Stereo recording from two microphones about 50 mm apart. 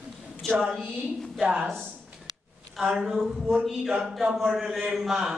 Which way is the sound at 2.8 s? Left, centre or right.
Centre.